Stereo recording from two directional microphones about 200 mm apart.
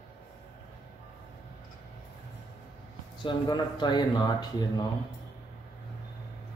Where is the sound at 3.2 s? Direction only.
20° left (ahead or behind).